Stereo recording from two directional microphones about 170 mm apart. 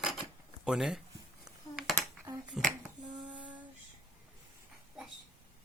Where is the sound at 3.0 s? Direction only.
25° right (ahead or behind).